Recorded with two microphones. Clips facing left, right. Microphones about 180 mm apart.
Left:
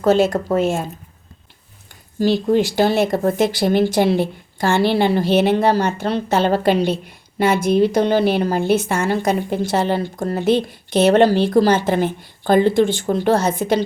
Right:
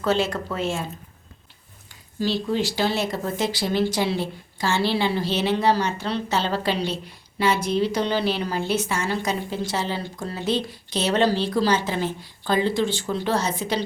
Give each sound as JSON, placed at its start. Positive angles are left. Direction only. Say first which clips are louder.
{"t": 0.0, "sound": "a woman's voice", "louder": "left 8 dB", "side_deg": 45}
{"t": 2.1, "sound": "a woman's voice", "louder": "left 8 dB", "side_deg": 50}